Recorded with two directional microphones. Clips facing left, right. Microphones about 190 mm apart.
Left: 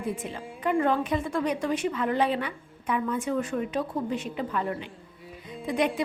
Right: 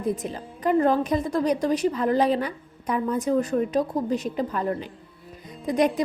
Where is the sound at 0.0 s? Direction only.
40° right (ahead or behind).